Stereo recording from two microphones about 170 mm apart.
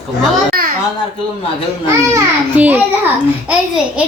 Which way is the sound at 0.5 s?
60° right (ahead or behind).